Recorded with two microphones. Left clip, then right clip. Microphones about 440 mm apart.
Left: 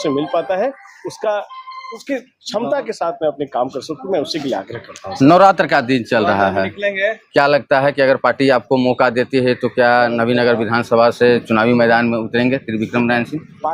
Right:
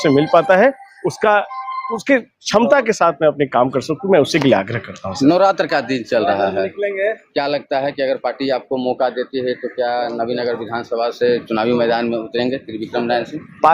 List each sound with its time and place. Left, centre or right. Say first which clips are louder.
0.0 s speech: right 5 dB; right
5.2 s speech: left 4 dB; left
6.7 s speech: left 1 dB; centre
7.3 s speech: left 9 dB; left